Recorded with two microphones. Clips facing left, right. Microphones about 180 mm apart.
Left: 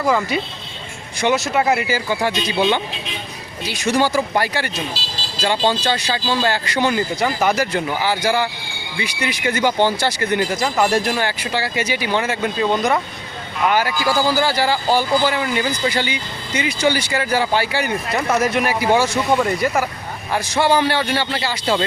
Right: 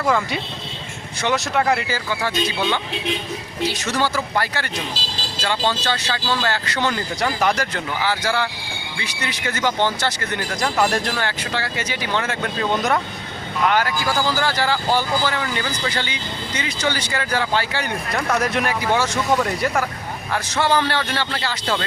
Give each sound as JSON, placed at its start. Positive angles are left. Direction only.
{"t": 0.0, "sound": "speech", "side_deg": 0}